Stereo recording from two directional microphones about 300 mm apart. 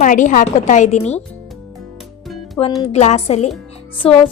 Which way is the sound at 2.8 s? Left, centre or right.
Left.